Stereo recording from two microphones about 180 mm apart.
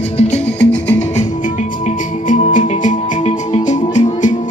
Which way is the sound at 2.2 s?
45° left (ahead or behind).